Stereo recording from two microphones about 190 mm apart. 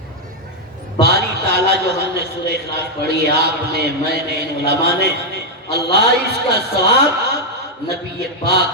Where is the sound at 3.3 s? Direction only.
60° right (ahead or behind).